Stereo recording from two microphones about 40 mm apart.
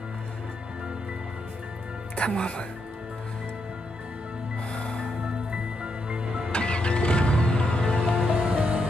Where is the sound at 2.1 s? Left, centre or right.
Left.